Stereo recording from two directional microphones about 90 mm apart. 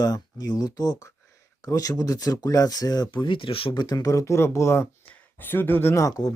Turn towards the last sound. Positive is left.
turn(degrees=35)  # may be behind; listen again after turning